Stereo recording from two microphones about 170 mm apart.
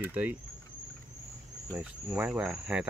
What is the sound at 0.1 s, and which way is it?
Speech, 10° right (ahead or behind).